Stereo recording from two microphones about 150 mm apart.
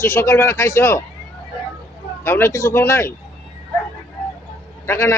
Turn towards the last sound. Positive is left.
turn(degrees=15)  # may be behind; listen again after turning